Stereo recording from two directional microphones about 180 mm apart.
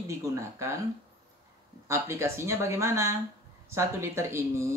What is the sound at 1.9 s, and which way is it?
Speech, 15° right (ahead or behind).